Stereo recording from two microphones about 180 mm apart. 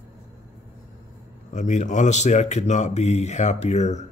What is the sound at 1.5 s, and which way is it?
Speech, 40° left (ahead or behind).